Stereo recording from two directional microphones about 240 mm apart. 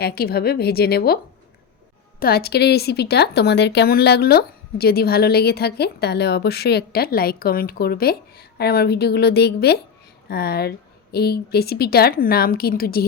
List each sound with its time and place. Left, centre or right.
0.0 s speech: left